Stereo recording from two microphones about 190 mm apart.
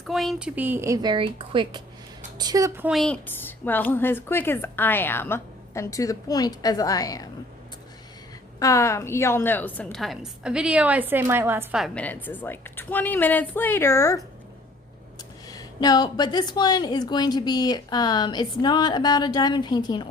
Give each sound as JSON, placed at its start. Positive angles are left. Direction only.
{"t": 0.1, "sound": "speech", "side_deg": 0}
{"t": 2.9, "sound": "a woman's voice", "side_deg": 5}
{"t": 8.5, "sound": "a woman's voice", "side_deg": 15}
{"t": 11.8, "sound": "a woman's voice", "side_deg": 5}
{"t": 15.4, "sound": "a woman's voice", "side_deg": 20}